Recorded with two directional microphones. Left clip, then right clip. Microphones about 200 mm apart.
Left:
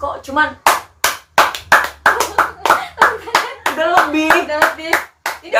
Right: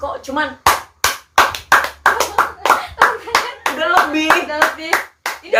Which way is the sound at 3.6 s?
15° right (ahead or behind).